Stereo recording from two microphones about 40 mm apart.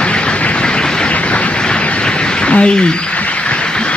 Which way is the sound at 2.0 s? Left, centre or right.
Left.